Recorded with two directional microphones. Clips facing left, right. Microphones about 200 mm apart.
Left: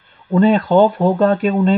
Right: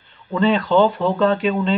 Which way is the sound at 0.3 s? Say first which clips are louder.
Left 4 dB; 50° left (ahead or behind).